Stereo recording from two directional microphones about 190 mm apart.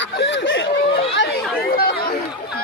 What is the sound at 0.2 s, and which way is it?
Snicker, 75° left (ahead or behind).